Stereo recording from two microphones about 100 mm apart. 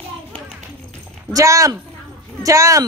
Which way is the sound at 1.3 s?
35° right (ahead or behind).